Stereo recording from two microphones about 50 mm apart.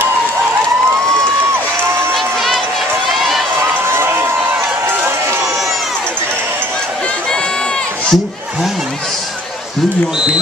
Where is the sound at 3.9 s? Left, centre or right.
Right.